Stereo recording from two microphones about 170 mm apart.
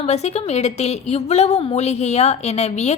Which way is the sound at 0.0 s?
40° left (ahead or behind).